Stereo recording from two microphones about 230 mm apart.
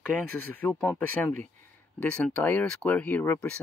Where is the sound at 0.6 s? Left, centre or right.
Centre.